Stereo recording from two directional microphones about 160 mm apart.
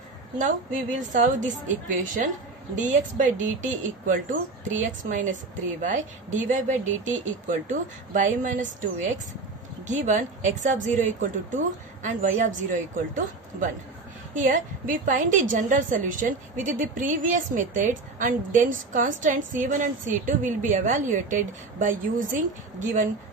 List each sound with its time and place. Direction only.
0.4 s a woman's voice: 50° right (ahead or behind)